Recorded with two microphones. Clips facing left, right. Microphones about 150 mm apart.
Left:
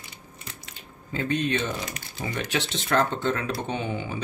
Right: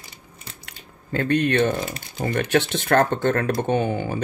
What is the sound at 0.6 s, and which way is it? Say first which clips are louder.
Squish: even; 60° right (ahead or behind).